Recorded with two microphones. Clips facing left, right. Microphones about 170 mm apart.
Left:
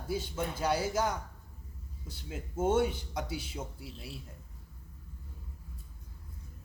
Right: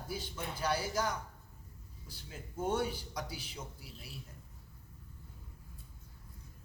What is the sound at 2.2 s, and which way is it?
A man's voice, 25° left (ahead or behind).